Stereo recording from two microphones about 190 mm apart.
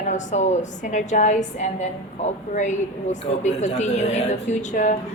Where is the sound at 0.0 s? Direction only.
40° left (ahead or behind).